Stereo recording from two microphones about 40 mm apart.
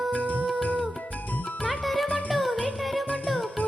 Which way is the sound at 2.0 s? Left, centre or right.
Left.